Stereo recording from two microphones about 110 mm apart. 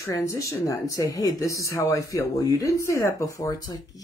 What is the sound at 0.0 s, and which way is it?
Speech, 25° left (ahead or behind).